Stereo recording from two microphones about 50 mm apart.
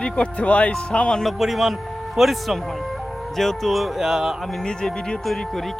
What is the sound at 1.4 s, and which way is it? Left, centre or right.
Speech, centre.